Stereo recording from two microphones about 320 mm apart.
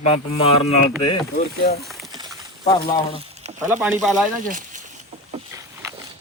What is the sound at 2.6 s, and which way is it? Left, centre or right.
Speech, centre.